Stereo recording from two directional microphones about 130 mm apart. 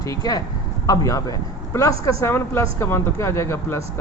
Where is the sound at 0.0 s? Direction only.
25° left (ahead or behind).